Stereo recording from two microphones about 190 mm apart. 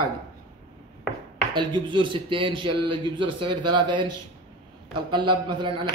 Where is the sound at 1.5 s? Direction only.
25° right (ahead or behind).